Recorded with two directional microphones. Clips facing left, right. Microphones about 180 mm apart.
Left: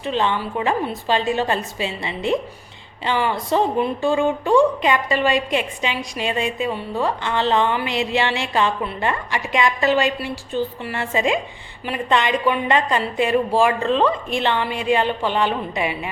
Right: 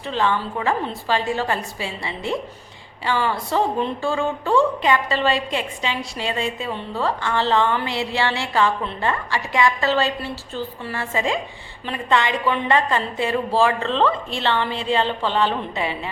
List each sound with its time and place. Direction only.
0.0 s a woman's voice: 20° left (ahead or behind)